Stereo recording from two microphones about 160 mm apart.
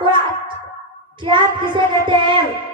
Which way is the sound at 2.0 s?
30° right (ahead or behind).